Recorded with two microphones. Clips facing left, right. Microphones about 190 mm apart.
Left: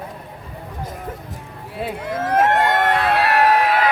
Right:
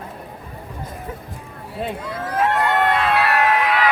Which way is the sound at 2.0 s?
50° left (ahead or behind).